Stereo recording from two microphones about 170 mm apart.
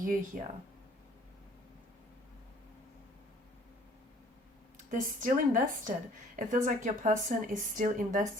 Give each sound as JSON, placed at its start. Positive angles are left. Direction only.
{"t": 0.3, "sound": "speech", "side_deg": -55}
{"t": 4.9, "sound": "speech", "side_deg": -50}